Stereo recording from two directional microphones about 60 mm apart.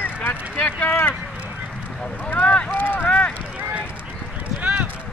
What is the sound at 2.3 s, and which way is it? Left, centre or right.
Speech, centre.